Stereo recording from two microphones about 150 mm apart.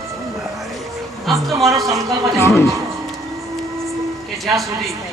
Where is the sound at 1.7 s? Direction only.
20° right (ahead or behind).